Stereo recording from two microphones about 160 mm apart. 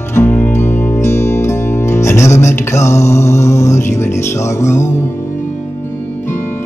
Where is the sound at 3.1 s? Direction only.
15° left (ahead or behind).